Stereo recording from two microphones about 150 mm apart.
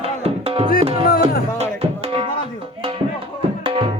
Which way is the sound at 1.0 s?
70° left (ahead or behind).